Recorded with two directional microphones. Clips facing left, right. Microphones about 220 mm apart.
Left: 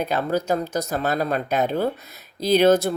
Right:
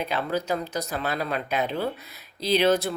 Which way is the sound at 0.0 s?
45° left (ahead or behind).